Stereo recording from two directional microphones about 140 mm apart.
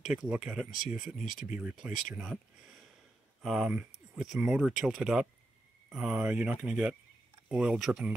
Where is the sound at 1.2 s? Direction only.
70° left (ahead or behind).